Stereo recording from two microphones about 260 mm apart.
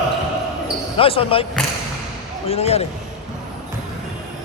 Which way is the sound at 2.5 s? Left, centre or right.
Left.